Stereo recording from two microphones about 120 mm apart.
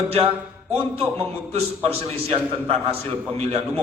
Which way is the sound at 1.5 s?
55° right (ahead or behind).